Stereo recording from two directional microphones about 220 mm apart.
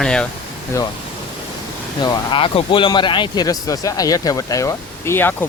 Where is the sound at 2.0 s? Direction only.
25° left (ahead or behind).